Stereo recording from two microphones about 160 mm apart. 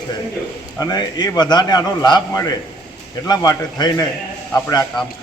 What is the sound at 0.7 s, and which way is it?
A man's voice, 25° left (ahead or behind).